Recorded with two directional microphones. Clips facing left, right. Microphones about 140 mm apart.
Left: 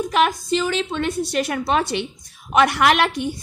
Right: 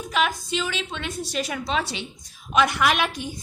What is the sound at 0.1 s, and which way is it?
A woman's voice, 50° left (ahead or behind).